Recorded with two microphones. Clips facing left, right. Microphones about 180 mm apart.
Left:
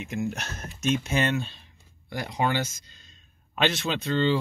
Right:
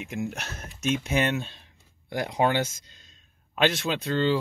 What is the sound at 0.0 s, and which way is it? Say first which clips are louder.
Speech: left 2 dB; 5° right (ahead or behind).